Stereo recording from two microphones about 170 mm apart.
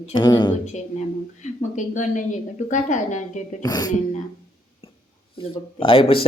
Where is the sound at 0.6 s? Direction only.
40° left (ahead or behind).